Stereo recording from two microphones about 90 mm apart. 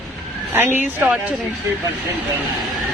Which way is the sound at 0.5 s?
25° right (ahead or behind).